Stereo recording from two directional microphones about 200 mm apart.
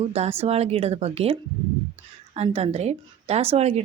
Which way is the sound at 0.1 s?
30° right (ahead or behind).